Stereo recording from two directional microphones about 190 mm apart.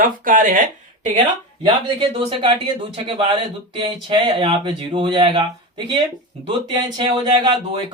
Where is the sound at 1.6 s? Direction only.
25° right (ahead or behind).